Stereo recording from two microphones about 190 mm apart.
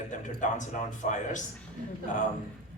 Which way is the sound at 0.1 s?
40° left (ahead or behind).